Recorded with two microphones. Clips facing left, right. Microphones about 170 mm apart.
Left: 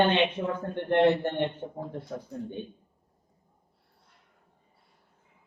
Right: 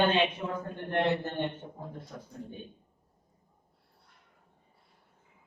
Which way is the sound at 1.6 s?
50° left (ahead or behind).